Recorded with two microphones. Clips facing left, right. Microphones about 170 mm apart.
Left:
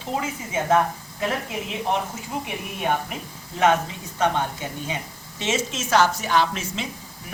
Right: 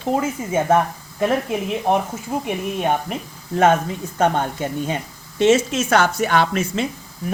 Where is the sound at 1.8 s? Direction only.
50° right (ahead or behind).